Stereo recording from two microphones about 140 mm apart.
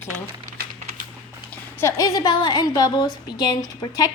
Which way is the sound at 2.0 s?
25° left (ahead or behind).